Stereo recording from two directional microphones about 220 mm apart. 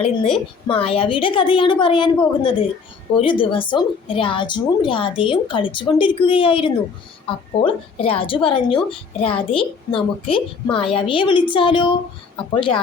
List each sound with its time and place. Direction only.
0.7 s a woman's voice: 25° left (ahead or behind)